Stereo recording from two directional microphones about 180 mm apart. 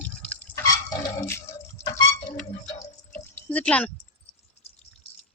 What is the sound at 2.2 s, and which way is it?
Drip, 45° left (ahead or behind).